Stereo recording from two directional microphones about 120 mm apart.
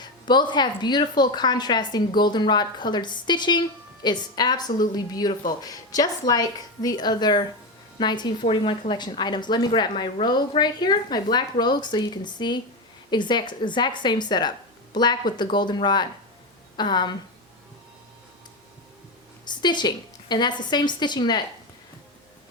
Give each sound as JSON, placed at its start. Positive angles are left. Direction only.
{"t": 0.0, "sound": "a woman's voice", "side_deg": 40}
{"t": 19.5, "sound": "a woman's voice", "side_deg": 40}